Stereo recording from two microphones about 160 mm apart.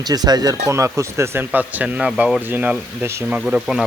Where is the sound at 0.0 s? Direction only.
25° right (ahead or behind).